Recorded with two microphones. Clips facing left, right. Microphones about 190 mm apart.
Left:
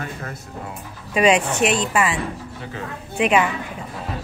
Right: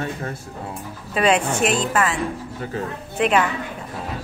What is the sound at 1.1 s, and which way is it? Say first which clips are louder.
Speech: left 2 dB; 10° left (ahead or behind).